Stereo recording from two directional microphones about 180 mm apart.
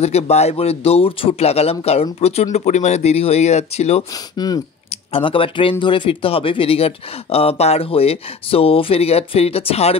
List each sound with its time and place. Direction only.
0.0 s speech: 35° left (ahead or behind)
4.1 s speech: 20° left (ahead or behind)